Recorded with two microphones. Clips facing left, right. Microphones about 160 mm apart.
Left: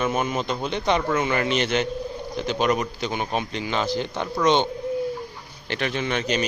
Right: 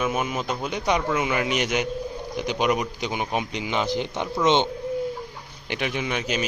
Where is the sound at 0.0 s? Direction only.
5° right (ahead or behind).